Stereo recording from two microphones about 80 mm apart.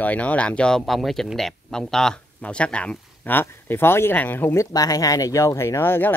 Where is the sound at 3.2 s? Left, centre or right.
Left.